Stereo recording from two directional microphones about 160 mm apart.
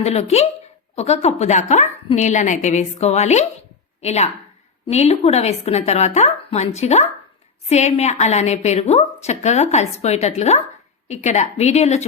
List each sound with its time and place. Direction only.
0.0 s a woman's voice: 40° left (ahead or behind)